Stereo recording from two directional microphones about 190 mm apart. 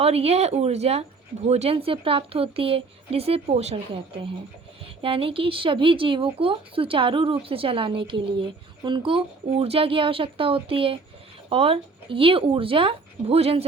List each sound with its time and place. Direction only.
0.0 s speech: 30° right (ahead or behind)